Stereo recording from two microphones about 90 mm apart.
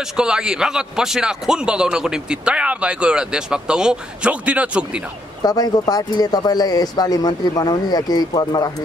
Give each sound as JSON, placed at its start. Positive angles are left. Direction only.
{"t": 0.2, "sound": "a man's voice", "side_deg": -10}
{"t": 5.4, "sound": "speech", "side_deg": 45}